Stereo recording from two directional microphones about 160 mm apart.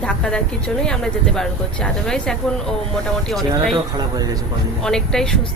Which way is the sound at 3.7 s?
25° right (ahead or behind).